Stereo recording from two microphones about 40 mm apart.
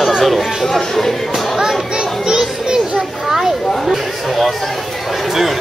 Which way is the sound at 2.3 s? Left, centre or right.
Centre.